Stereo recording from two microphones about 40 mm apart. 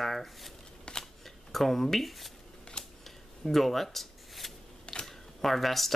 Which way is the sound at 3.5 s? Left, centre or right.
Centre.